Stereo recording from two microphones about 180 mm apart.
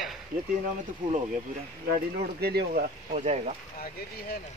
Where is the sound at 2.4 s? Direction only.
60° right (ahead or behind); by 3.4 s 40° right (ahead or behind).